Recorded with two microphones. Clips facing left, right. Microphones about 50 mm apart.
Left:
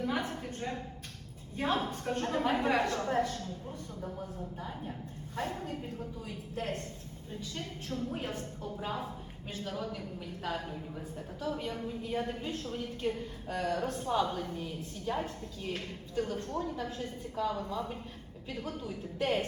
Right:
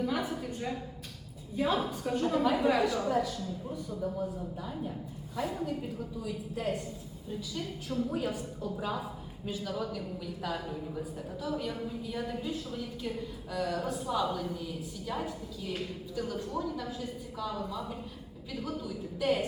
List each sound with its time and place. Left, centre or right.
0.0 s a sound: left
1.5 s a woman's voice: left
5.4 s a woman's voice: left
7.9 s a woman's voice: left
11.3 s a woman's voice: left